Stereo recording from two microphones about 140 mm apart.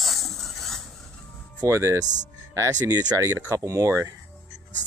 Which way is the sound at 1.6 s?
20° right (ahead or behind).